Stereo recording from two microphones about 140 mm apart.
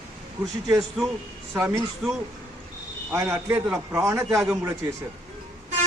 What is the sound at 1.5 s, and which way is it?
Speech, 20° right (ahead or behind).